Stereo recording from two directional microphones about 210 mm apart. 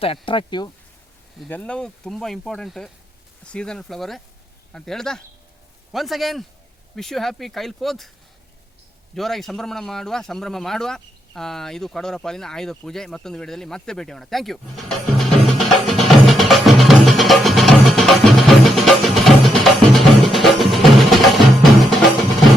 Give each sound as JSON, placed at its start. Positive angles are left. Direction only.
{"t": 0.0, "sound": "speech", "side_deg": 25}
{"t": 1.4, "sound": "speech", "side_deg": 5}
{"t": 9.1, "sound": "speech", "side_deg": 0}
{"t": 15.5, "sound": "music", "side_deg": 0}